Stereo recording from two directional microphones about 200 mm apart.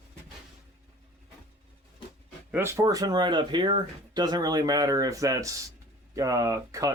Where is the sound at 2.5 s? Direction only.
10° right (ahead or behind).